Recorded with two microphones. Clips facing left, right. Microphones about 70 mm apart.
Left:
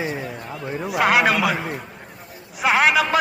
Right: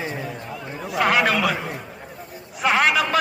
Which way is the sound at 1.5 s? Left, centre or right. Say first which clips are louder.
Left 2 dB; centre.